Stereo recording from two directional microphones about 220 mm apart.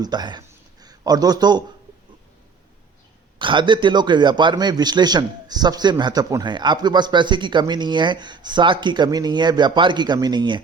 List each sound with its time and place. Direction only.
0.0 s speech: 20° right (ahead or behind)
3.3 s a man's voice: 20° right (ahead or behind)